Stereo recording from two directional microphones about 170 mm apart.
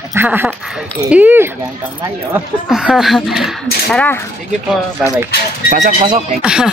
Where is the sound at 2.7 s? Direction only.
5° right (ahead or behind).